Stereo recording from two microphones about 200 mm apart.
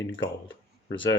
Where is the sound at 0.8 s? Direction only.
25° left (ahead or behind).